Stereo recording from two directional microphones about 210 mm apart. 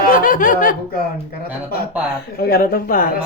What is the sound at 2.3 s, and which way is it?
Speech, 45° left (ahead or behind).